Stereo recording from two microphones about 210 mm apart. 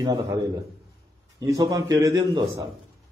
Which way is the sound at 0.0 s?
20° right (ahead or behind).